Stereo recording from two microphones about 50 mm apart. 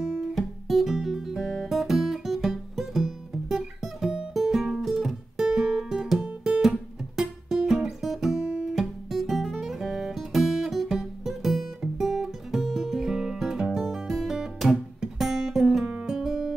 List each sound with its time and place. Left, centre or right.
0.0 s guitar: centre
5.5 s music: centre
8.7 s music: centre
13.7 s guitar: centre
15.9 s music: centre